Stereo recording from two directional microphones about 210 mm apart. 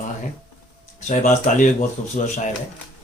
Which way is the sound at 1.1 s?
35° left (ahead or behind).